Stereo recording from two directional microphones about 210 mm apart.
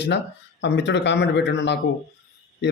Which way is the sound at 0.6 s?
55° left (ahead or behind).